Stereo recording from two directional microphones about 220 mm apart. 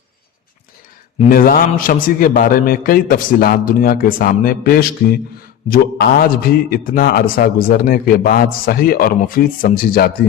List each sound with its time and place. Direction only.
1.3 s a man's voice: 40° left (ahead or behind)